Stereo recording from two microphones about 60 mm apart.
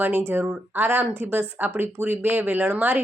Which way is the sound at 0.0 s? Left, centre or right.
Right.